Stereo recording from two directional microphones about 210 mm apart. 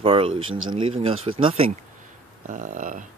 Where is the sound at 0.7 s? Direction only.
25° right (ahead or behind).